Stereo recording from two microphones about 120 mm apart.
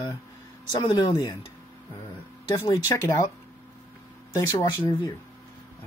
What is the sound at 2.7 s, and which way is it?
Speech, 25° left (ahead or behind).